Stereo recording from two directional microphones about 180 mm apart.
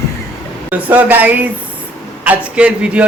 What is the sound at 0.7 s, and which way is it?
A man's voice, 10° right (ahead or behind).